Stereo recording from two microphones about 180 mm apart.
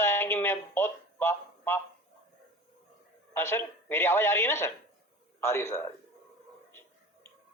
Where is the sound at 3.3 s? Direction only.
15° left (ahead or behind).